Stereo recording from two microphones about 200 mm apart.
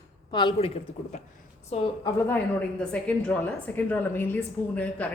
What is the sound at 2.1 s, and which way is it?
A woman's voice, 10° left (ahead or behind).